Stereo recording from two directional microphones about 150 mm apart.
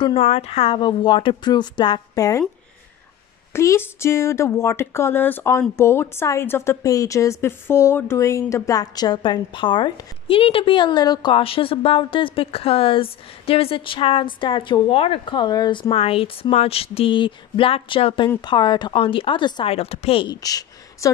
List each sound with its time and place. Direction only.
0.0 s a woman's voice: 40° left (ahead or behind); by 2.4 s 25° left (ahead or behind)
3.5 s a woman's voice: 15° left (ahead or behind)
19.7 s a woman's voice: 40° left (ahead or behind)
20.3 s speech: 25° left (ahead or behind)